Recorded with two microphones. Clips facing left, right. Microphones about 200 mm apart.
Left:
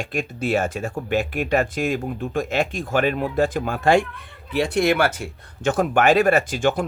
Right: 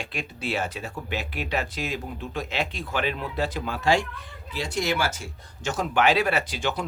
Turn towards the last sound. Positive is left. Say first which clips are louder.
# left 7 dB
turn(degrees=50)  # may be behind; listen again after turning